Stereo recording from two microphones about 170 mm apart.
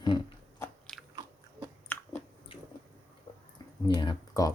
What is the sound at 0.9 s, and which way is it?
Biting, 5° left (ahead or behind).